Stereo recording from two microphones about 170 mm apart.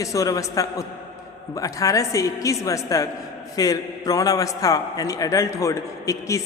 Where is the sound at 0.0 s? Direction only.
20° left (ahead or behind).